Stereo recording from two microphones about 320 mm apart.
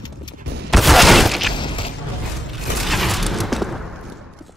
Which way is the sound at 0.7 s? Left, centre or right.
Centre.